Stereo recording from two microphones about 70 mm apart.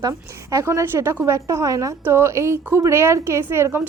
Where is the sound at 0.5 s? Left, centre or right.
Right.